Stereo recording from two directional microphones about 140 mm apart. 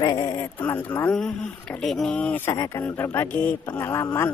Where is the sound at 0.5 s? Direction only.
15° left (ahead or behind).